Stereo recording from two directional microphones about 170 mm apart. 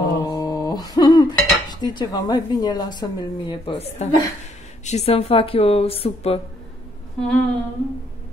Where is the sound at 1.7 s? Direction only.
25° left (ahead or behind).